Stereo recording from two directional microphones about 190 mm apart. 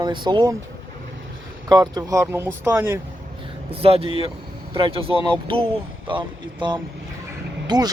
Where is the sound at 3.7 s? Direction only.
30° right (ahead or behind).